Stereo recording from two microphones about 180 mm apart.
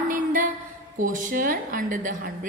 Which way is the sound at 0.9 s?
45° right (ahead or behind).